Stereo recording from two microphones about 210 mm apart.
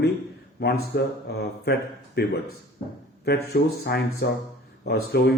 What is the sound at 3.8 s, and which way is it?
Speech, 55° left (ahead or behind).